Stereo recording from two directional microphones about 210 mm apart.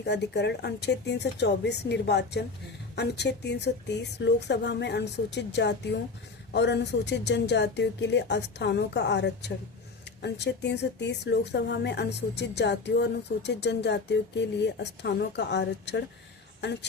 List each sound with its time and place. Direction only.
0.0 s a woman's voice: 55° left (ahead or behind)